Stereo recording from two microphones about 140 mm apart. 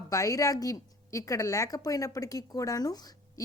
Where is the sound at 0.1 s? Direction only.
25° left (ahead or behind).